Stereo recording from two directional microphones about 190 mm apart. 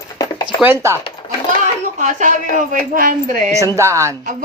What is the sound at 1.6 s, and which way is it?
A woman's voice, 40° right (ahead or behind).